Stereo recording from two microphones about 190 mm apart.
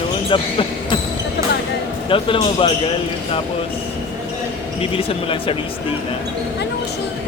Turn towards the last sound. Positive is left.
turn(degrees=30)  # may be behind; listen again after turning